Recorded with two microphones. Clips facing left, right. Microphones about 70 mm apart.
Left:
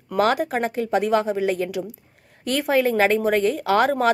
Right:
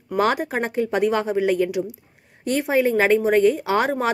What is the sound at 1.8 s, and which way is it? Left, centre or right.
Speech, centre.